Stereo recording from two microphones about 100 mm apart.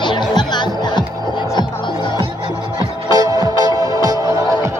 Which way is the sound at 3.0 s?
40° right (ahead or behind).